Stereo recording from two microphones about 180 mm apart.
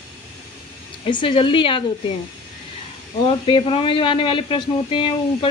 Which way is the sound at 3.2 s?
30° left (ahead or behind).